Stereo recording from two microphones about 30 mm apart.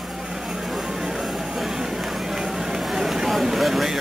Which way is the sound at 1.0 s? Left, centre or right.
Centre.